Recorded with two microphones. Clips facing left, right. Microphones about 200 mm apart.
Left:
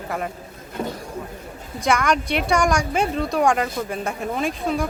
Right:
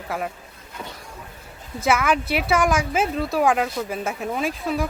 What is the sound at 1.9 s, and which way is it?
Speech, 5° right (ahead or behind).